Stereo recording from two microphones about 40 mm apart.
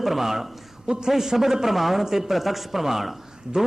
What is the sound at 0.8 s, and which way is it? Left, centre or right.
Speech, right.